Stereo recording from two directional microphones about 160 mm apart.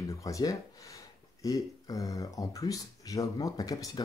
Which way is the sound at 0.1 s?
20° left (ahead or behind).